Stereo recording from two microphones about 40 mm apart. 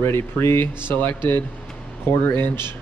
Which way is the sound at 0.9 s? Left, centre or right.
Left.